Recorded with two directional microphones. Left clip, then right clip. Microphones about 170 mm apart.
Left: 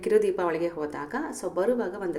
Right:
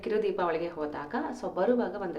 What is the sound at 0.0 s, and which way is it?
A woman's voice, 20° left (ahead or behind).